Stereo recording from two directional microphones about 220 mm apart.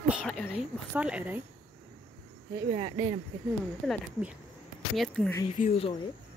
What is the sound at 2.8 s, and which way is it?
Speech, 20° right (ahead or behind).